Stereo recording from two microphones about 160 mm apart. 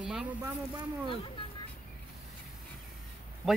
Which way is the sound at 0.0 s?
5° right (ahead or behind).